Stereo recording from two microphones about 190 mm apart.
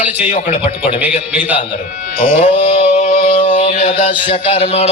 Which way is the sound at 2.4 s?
35° left (ahead or behind).